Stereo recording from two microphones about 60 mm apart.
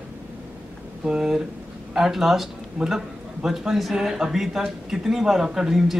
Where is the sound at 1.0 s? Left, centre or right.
Centre.